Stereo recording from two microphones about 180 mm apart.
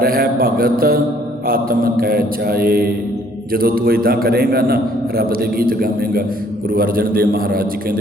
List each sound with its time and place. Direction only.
0.0 s a man's voice: 55° right (ahead or behind)